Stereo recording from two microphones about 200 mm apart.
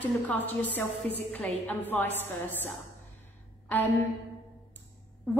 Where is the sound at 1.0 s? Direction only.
30° right (ahead or behind).